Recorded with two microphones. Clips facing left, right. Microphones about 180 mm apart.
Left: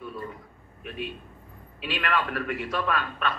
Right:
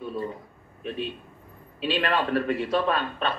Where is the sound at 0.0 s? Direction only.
30° right (ahead or behind).